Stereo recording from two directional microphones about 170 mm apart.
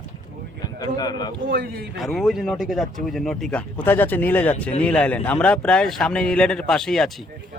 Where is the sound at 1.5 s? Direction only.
60° right (ahead or behind).